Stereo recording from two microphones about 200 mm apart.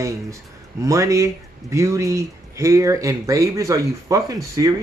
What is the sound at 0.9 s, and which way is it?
Speech, 15° right (ahead or behind).